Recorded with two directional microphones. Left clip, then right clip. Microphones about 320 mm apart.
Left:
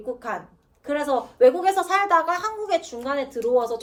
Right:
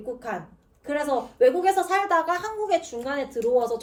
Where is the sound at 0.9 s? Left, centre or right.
Centre.